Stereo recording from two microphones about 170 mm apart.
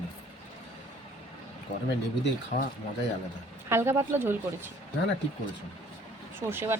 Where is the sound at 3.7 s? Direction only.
15° right (ahead or behind).